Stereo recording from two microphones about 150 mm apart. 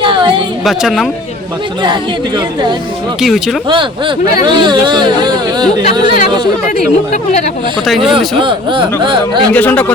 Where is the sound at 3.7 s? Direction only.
35° right (ahead or behind).